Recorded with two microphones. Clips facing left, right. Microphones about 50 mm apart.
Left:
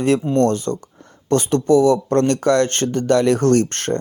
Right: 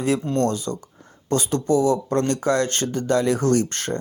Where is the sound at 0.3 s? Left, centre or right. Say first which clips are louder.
Left 5 dB; left.